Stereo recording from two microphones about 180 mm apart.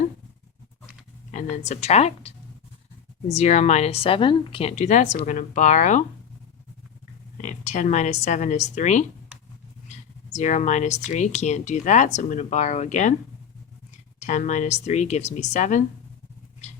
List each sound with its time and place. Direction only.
1.3 s speech: 40° left (ahead or behind)
3.3 s speech: 40° left (ahead or behind)
7.3 s a woman's voice: 40° left (ahead or behind)
14.2 s speech: 40° left (ahead or behind)